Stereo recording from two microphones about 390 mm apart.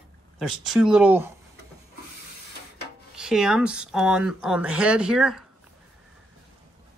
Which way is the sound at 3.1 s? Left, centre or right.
Centre.